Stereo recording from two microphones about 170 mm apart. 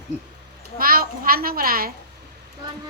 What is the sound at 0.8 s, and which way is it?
A child's voice, 60° right (ahead or behind).